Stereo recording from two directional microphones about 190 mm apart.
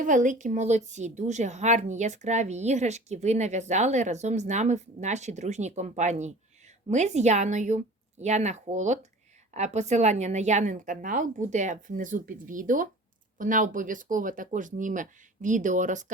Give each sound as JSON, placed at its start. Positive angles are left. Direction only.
{"t": 0.0, "sound": "a woman's voice", "side_deg": -40}